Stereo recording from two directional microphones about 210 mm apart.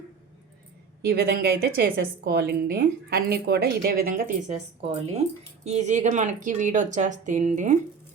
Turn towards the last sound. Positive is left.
turn(degrees=-35)  # may be behind; listen again after turning